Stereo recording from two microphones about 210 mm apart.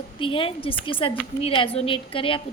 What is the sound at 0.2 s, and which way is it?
A woman's voice, 25° left (ahead or behind).